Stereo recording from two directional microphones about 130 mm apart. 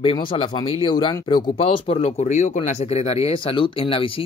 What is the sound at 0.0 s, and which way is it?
Speech, 45° left (ahead or behind).